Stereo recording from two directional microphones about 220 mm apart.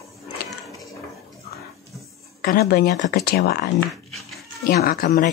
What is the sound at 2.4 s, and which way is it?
Speech, 45° left (ahead or behind).